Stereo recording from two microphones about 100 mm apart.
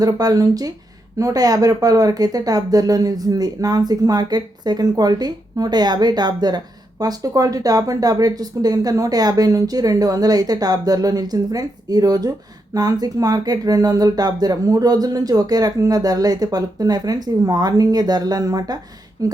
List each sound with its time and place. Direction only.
0.0 s speech: 40° right (ahead or behind)